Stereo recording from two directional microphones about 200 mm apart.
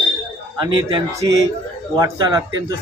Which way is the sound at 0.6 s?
25° right (ahead or behind).